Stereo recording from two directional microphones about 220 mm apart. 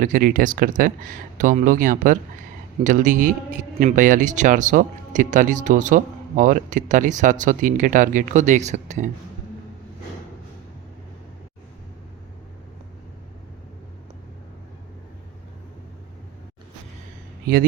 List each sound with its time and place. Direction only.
0.0 s a man's voice: 40° right (ahead or behind)